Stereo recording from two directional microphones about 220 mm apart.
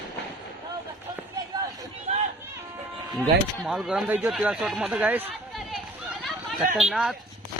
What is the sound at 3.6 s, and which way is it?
Speech, centre (ahead or behind).